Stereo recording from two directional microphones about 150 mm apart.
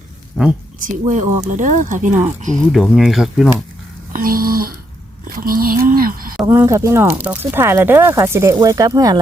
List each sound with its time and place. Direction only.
0.4 s a woman's voice: centre (ahead or behind)
0.9 s speech: 55° right (ahead or behind)
2.7 s speech: centre (ahead or behind)
4.1 s a sound: 75° right (ahead or behind)
5.4 s speech: 75° right (ahead or behind)
6.4 s speech: 20° right (ahead or behind)